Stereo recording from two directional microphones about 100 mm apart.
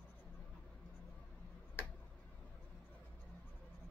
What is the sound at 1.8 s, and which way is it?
Tick-tock, 20° left (ahead or behind).